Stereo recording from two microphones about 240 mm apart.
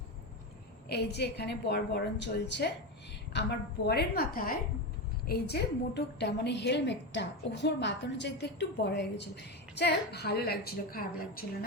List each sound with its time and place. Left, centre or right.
0.9 s a woman's voice: left
3.8 s a woman's voice: left